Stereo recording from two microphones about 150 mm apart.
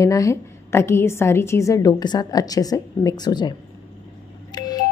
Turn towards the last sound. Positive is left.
turn(degrees=25)  # may be behind; listen again after turning